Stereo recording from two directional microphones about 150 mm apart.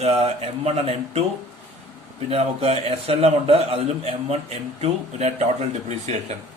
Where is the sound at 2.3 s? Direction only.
40° right (ahead or behind).